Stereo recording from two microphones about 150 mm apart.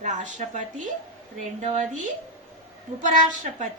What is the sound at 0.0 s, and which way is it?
A woman's voice, 55° right (ahead or behind).